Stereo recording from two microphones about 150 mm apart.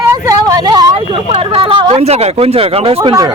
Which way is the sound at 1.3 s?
35° right (ahead or behind).